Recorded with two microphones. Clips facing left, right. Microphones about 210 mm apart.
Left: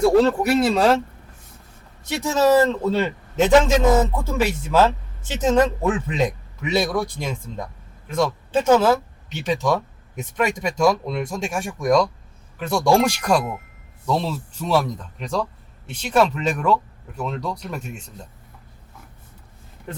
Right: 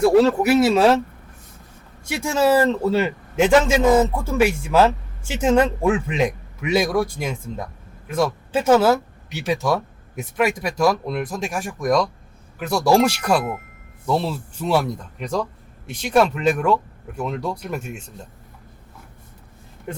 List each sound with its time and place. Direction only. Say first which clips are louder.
0.0 s speech: right 1 dB; 5° right (ahead or behind)
2.3 s speech: left 1 dB; 10° right (ahead or behind)